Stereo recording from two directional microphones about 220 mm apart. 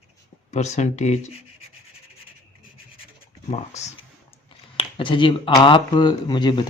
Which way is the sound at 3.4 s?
30° left (ahead or behind).